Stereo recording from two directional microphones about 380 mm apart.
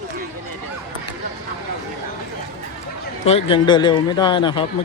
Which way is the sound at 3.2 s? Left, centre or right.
Centre.